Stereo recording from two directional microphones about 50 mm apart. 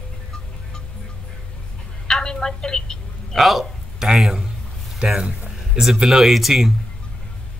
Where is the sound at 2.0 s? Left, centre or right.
Centre.